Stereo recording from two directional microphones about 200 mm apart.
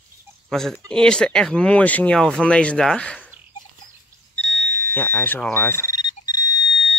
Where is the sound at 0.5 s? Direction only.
Centre (ahead or behind).